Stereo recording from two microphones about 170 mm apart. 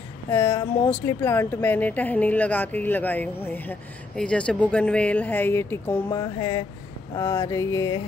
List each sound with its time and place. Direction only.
0.3 s speech: 15° left (ahead or behind)
6.1 s mantra: 20° left (ahead or behind)
7.2 s speech: 15° left (ahead or behind)